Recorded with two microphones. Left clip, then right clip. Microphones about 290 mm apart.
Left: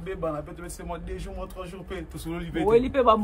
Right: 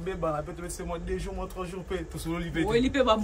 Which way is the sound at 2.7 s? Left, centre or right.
Centre.